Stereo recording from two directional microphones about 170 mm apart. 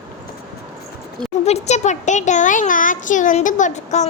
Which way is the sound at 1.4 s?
40° left (ahead or behind).